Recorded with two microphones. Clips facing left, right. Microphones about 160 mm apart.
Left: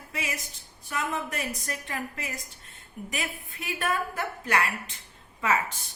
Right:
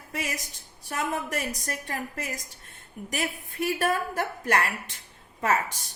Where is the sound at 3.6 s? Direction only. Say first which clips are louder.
Right 3 dB; 40° right (ahead or behind).